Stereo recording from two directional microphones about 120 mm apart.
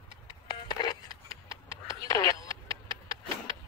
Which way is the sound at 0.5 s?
40° left (ahead or behind).